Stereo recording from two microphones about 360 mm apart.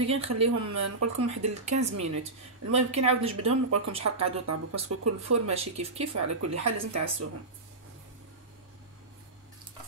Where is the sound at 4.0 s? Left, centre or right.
Right.